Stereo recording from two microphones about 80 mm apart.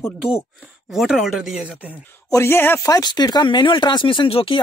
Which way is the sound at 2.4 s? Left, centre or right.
Left.